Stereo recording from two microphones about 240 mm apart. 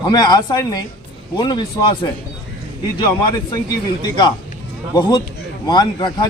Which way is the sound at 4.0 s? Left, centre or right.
Centre.